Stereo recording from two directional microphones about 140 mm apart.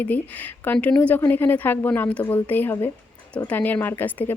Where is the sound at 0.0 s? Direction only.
10° left (ahead or behind).